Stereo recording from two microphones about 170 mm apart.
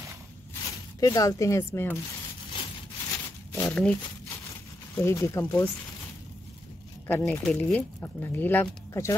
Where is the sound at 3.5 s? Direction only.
10° left (ahead or behind).